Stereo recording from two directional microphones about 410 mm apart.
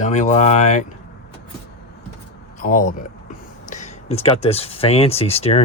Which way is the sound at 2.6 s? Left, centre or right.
Centre.